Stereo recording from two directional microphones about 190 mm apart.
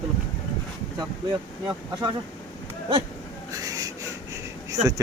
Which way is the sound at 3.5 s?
20° right (ahead or behind).